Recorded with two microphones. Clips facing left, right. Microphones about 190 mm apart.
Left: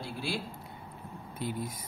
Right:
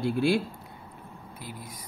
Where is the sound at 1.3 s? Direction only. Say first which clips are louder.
Left 8 dB; 25° left (ahead or behind).